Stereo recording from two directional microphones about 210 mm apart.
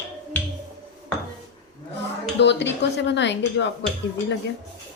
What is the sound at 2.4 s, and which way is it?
Speech, 55° left (ahead or behind).